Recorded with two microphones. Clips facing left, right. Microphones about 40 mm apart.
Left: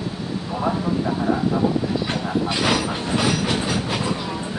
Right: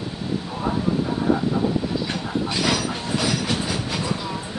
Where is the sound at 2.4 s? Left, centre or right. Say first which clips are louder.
Left 1 dB; left.